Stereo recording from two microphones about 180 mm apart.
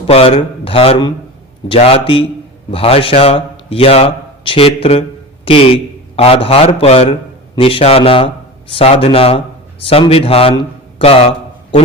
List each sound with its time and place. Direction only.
0.1 s a man's voice: 30° left (ahead or behind)